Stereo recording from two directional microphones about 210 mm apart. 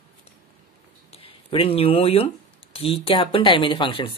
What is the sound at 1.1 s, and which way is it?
Speech, 25° left (ahead or behind).